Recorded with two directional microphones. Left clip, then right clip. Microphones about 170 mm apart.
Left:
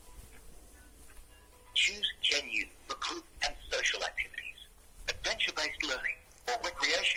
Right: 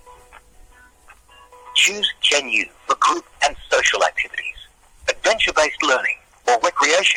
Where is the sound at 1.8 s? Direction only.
45° right (ahead or behind).